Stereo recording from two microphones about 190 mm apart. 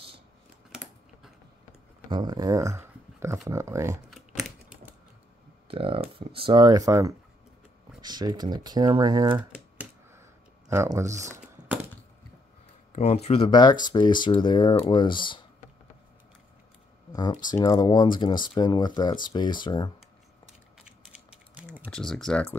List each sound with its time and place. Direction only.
2.0 s speech: 25° right (ahead or behind)
4.1 s typing: 5° right (ahead or behind)
5.7 s speech: 30° right (ahead or behind)
9.5 s computer keyboard: 10° right (ahead or behind)
10.7 s speech: 15° right (ahead or behind)
12.9 s speech: 35° left (ahead or behind)
17.1 s speech: 20° left (ahead or behind)
21.1 s typing: 5° right (ahead or behind)
21.9 s speech: 5° left (ahead or behind)